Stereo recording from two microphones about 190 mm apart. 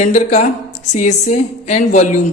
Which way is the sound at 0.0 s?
35° left (ahead or behind).